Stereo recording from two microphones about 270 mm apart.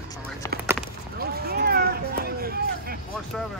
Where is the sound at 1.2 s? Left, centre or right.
Right.